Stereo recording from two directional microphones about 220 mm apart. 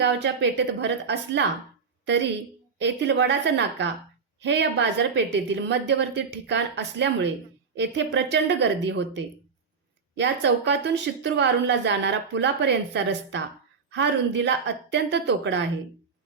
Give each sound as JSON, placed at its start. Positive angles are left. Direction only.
{"t": 0.0, "sound": "a woman's voice", "side_deg": -50}
{"t": 2.7, "sound": "a woman's voice", "side_deg": -50}